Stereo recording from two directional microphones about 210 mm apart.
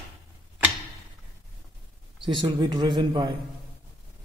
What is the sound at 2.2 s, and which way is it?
Speech, 20° right (ahead or behind).